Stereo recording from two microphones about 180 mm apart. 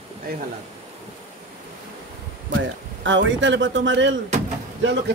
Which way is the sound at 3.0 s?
90° right.